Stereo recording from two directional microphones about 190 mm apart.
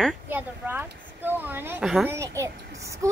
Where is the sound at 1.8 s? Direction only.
Centre (ahead or behind).